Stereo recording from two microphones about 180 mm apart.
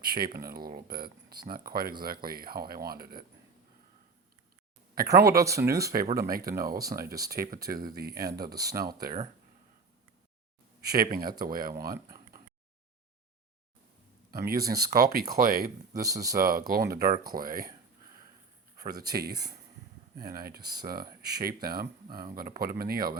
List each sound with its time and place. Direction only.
0.0 s speech: 55° right (ahead or behind)
4.9 s speech: 60° right (ahead or behind)
5.6 s speech: 15° right (ahead or behind)
6.1 s speech: 55° right (ahead or behind)
7.1 s speech: 20° right (ahead or behind)
7.3 s speech: 50° right (ahead or behind)
8.5 s speech: 20° right (ahead or behind)
8.8 s speech: 55° right (ahead or behind)
10.9 s speech: 55° right (ahead or behind)
14.3 s speech: 55° right (ahead or behind)
15.9 s speech: 20° right (ahead or behind)
16.4 s speech: 55° right (ahead or behind)
18.8 s speech: 60° right (ahead or behind)